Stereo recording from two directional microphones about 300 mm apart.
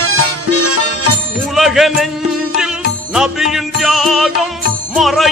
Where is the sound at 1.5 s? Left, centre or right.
Centre.